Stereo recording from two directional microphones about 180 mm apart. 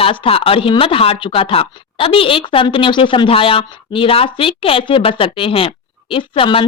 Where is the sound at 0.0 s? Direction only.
30° left (ahead or behind).